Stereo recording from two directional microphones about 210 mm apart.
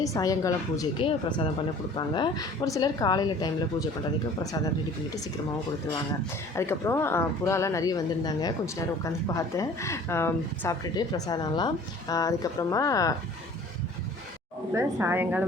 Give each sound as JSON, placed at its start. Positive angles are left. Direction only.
{"t": 0.0, "sound": "speech", "side_deg": 15}
{"t": 6.6, "sound": "speech", "side_deg": 10}
{"t": 14.7, "sound": "a woman's voice", "side_deg": -10}